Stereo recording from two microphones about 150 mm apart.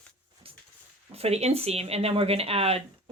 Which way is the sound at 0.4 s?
40° right (ahead or behind).